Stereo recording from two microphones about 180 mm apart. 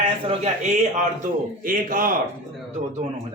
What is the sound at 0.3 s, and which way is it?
A man's voice, 40° right (ahead or behind).